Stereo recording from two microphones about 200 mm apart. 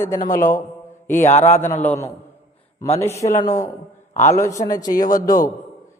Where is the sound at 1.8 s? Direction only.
10° left (ahead or behind).